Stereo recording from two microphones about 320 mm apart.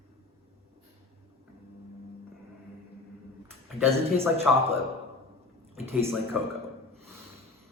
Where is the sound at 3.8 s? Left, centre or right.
Centre.